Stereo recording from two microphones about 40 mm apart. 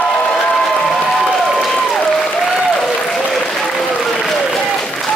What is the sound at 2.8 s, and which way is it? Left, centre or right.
Applause, centre.